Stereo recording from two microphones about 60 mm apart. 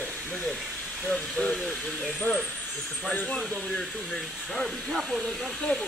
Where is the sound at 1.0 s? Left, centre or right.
Centre.